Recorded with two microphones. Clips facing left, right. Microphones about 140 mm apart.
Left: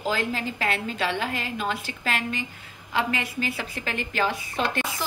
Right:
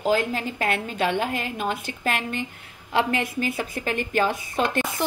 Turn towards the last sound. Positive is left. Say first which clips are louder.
# right 4 dB
turn(degrees=-50)  # may be behind; listen again after turning